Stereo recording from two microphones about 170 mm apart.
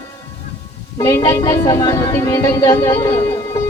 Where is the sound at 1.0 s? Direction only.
20° left (ahead or behind).